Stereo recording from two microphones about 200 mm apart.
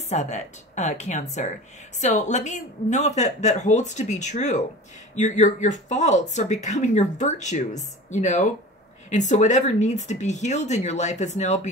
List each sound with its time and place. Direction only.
0.1 s speech: 35° left (ahead or behind)